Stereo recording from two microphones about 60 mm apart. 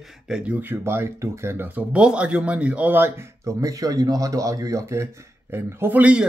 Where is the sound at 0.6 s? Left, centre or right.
Right.